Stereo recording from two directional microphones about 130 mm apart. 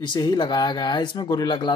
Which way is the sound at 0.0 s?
35° left (ahead or behind).